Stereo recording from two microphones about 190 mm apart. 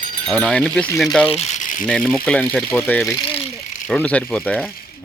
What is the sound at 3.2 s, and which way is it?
Speech, 30° left (ahead or behind).